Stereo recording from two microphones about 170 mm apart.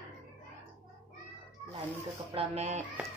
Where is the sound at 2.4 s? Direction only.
40° right (ahead or behind).